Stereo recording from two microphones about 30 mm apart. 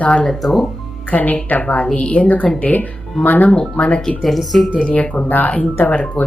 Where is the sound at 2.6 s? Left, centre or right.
Left.